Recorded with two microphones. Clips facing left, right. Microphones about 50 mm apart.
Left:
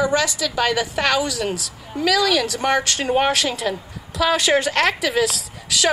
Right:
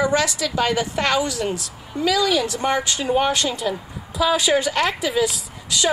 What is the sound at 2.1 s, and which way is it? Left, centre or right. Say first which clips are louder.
Speech: left 1 dB; left.